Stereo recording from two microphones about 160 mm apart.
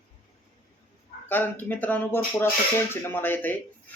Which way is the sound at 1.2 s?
10° left (ahead or behind).